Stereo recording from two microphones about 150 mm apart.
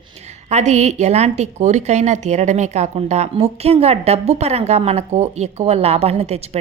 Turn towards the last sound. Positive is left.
turn(degrees=-45)  # may be behind; listen again after turning